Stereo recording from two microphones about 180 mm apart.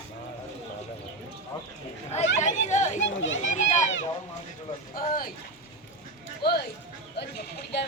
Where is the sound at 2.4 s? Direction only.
40° left (ahead or behind).